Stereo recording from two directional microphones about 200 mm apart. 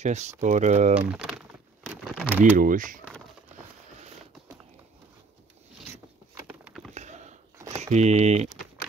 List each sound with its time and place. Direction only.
0.0 s speech: 35° right (ahead or behind)
2.0 s speech: centre (ahead or behind)
2.5 s speech: 40° right (ahead or behind)
6.3 s a sound: 5° right (ahead or behind)
6.9 s a sound: 35° right (ahead or behind)
7.7 s speech: 35° right (ahead or behind)